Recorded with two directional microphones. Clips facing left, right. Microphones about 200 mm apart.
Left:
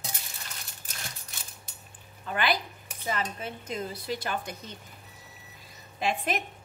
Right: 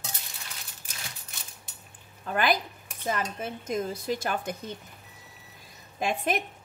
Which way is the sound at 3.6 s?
45° right (ahead or behind).